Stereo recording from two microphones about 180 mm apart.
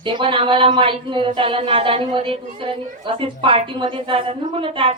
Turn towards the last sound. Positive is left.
turn(degrees=-30)  # may be behind; listen again after turning